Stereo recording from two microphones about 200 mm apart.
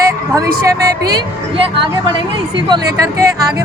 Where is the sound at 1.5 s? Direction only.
25° right (ahead or behind).